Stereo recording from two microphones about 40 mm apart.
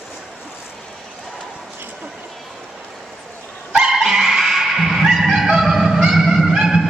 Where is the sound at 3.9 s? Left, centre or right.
Centre.